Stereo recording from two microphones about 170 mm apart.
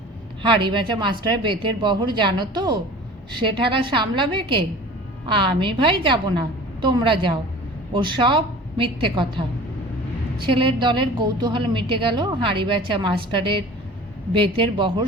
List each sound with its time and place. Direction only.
0.4 s a woman's voice: 30° right (ahead or behind)